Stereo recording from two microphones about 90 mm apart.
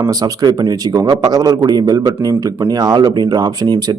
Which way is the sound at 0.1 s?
45° right (ahead or behind).